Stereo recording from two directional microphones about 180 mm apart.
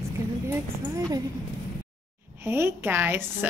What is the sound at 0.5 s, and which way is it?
Speech, 15° right (ahead or behind).